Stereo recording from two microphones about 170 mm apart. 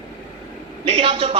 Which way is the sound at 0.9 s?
30° right (ahead or behind).